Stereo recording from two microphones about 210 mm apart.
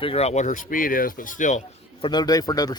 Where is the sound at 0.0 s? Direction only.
30° left (ahead or behind).